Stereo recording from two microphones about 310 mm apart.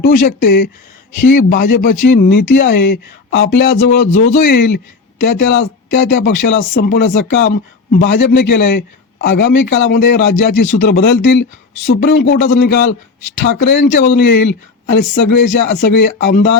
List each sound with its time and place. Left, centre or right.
0.0 s speech: left
4.1 s speech: left
4.4 s speech: left
10.7 s speech: left